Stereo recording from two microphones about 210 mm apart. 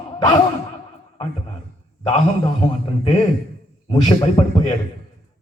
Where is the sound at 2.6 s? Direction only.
25° left (ahead or behind).